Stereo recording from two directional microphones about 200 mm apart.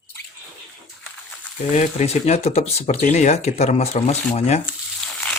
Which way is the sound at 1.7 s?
35° left (ahead or behind).